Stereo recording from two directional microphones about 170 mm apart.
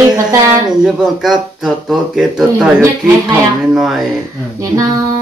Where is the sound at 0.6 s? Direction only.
5° right (ahead or behind).